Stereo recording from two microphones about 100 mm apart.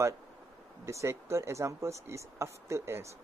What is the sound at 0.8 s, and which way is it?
Speech, 25° right (ahead or behind).